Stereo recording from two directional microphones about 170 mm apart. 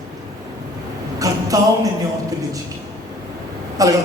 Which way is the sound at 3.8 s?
20° right (ahead or behind).